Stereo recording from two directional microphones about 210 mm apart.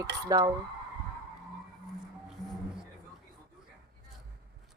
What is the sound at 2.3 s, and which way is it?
Music, centre (ahead or behind).